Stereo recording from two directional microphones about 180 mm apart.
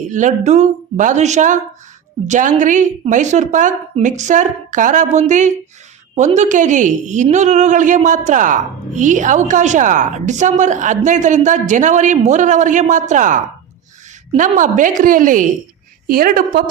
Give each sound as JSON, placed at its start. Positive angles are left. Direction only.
{"t": 0.1, "sound": "a woman's voice", "side_deg": -45}